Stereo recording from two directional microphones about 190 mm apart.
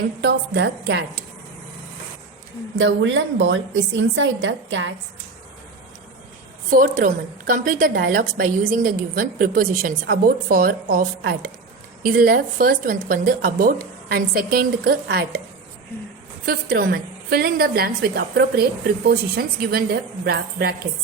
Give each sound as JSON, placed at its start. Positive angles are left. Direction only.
{"t": 0.2, "sound": "a woman's voice", "side_deg": -65}
{"t": 2.7, "sound": "speech", "side_deg": -75}
{"t": 6.7, "sound": "a woman's voice", "side_deg": -45}
{"t": 16.5, "sound": "a woman's voice", "side_deg": -50}